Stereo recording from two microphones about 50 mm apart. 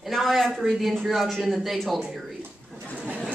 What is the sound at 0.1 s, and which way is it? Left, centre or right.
Speech, centre.